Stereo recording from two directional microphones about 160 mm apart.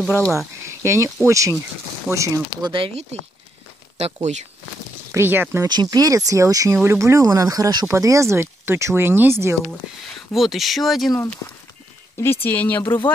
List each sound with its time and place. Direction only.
0.0 s speech: 10° left (ahead or behind)
0.7 s speech: 15° right (ahead or behind)
2.7 s speech: 35° right (ahead or behind)
5.1 s speech: 15° right (ahead or behind)
5.7 s speech: 25° right (ahead or behind)
9.8 s speech: 5° right (ahead or behind)
11.1 s speech: 15° left (ahead or behind)